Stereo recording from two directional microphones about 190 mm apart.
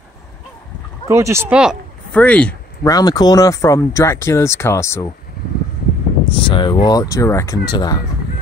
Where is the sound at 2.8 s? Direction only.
20° left (ahead or behind).